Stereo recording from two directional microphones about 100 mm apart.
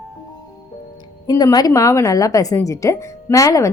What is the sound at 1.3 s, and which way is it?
A woman's voice, 35° left (ahead or behind).